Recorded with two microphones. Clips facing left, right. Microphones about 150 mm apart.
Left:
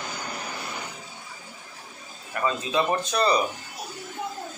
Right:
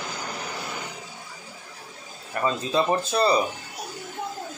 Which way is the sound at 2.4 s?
35° right (ahead or behind).